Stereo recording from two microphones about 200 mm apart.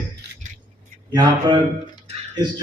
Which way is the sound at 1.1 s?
20° right (ahead or behind).